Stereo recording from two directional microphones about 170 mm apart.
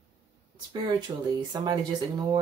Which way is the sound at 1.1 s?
20° right (ahead or behind).